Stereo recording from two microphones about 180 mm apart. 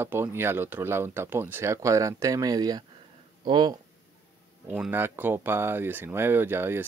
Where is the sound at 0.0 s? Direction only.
15° right (ahead or behind).